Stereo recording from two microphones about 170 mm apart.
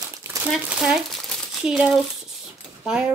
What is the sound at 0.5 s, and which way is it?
Speech, 5° right (ahead or behind).